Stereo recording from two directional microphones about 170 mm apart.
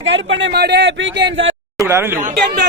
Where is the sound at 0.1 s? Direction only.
75° right (ahead or behind).